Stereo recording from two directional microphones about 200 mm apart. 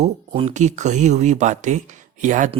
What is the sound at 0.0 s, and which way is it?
Speech, 35° right (ahead or behind).